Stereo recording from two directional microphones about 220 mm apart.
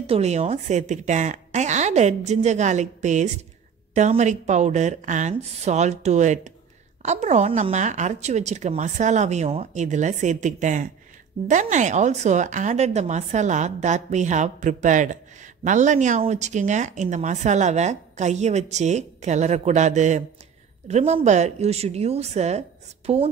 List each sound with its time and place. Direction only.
0.0 s a woman's voice: 30° right (ahead or behind)